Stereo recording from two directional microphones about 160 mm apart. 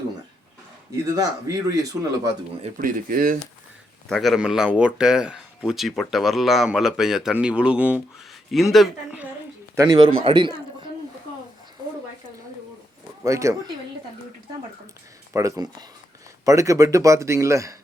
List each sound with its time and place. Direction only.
1.0 s speech: 25° right (ahead or behind)
2.7 s speech: 60° right (ahead or behind)
4.1 s speech: centre (ahead or behind)
9.7 s speech: 25° right (ahead or behind)
13.2 s speech: 20° right (ahead or behind)
15.3 s speech: 20° right (ahead or behind)